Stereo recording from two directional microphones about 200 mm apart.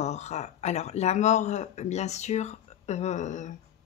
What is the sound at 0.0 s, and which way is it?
Speech, 35° left (ahead or behind).